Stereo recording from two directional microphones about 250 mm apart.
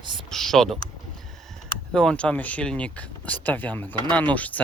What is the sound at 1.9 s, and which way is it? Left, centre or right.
Speech, centre.